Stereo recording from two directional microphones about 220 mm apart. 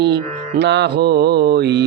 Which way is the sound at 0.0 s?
50° right (ahead or behind).